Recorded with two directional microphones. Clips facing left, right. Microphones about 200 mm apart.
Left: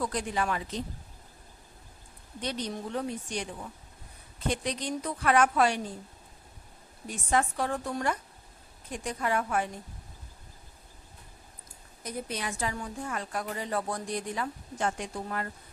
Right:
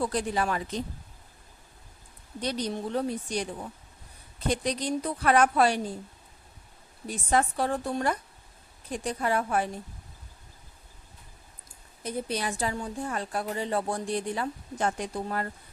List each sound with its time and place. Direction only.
0.0 s speech: 35° right (ahead or behind)
2.4 s speech: 35° right (ahead or behind)
4.4 s speech: 35° right (ahead or behind)
7.1 s speech: 35° right (ahead or behind)
12.0 s speech: 35° right (ahead or behind)